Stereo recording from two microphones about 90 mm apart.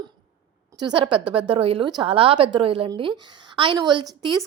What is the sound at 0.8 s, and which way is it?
A woman's voice, 60° right (ahead or behind).